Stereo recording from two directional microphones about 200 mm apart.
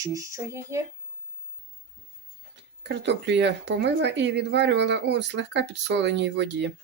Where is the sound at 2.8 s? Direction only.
60° right (ahead or behind).